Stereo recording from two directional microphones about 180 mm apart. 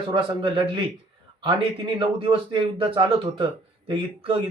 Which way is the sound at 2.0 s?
30° right (ahead or behind).